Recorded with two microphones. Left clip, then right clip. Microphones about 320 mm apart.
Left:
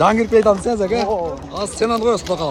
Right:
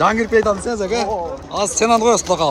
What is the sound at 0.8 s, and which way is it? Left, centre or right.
A man's voice, centre.